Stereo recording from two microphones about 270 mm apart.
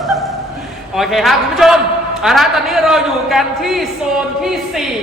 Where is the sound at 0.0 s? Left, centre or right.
Centre.